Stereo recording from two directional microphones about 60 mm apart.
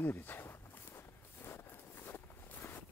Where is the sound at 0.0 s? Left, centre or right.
Left.